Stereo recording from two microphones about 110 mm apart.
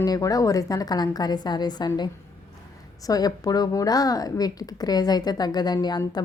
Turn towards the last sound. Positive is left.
turn(degrees=40)  # may be behind; listen again after turning